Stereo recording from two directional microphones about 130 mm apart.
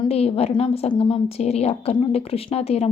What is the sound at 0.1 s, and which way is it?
A woman's voice, 50° left (ahead or behind).